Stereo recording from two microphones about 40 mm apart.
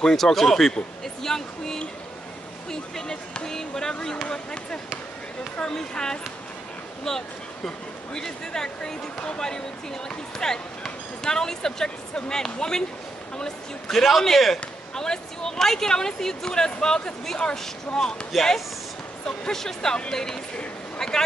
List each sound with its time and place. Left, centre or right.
0.0 s speech: centre
1.0 s a sound: centre
5.6 s speech: centre
13.9 s speech: centre
19.2 s speech: centre
21.0 s boat: centre